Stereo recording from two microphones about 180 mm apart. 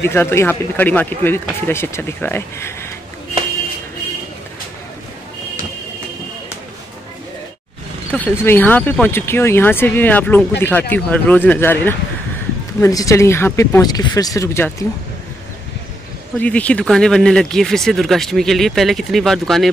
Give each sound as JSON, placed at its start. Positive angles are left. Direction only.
{"t": 0.0, "sound": "speech", "side_deg": 15}
{"t": 8.1, "sound": "speech", "side_deg": 10}
{"t": 16.3, "sound": "speech", "side_deg": 5}